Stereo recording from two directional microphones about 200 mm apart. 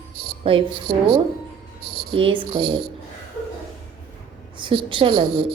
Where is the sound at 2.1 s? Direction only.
25° right (ahead or behind).